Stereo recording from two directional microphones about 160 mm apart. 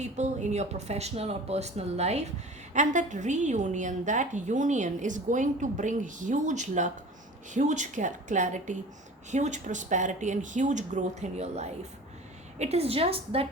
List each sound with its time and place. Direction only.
0.0 s a woman's voice: 45° right (ahead or behind)